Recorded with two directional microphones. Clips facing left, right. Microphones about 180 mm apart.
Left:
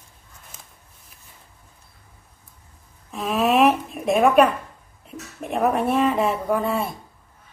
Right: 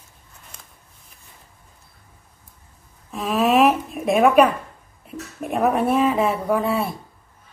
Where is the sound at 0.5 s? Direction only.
5° left (ahead or behind).